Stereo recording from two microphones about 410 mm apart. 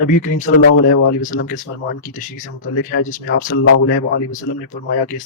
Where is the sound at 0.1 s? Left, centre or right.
Centre.